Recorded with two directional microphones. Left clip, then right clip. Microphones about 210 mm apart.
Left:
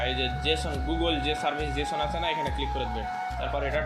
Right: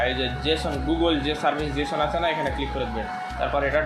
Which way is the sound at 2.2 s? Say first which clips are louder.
Right 4 dB; centre (ahead or behind).